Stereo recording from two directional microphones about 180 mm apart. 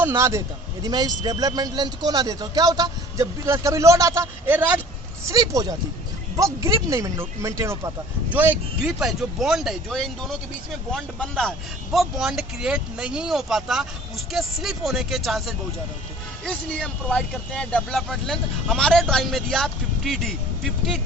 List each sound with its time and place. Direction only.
0.1 s a man's voice: 15° right (ahead or behind); by 20.3 s centre (ahead or behind)